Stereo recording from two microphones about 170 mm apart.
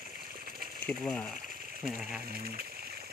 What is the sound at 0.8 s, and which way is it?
Speech, 10° left (ahead or behind).